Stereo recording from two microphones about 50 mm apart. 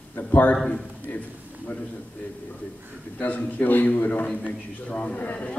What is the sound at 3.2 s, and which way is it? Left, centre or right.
A man's voice, left.